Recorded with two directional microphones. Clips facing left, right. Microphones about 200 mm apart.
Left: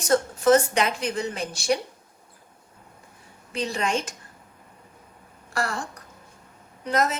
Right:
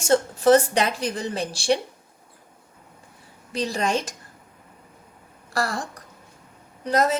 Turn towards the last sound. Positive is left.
turn(degrees=-35)  # may be behind; listen again after turning